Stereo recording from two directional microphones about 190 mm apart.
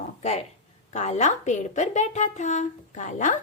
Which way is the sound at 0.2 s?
35° left (ahead or behind).